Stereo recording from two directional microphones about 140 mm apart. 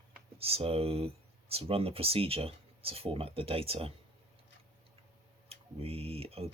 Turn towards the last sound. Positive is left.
turn(degrees=-45)  # may be behind; listen again after turning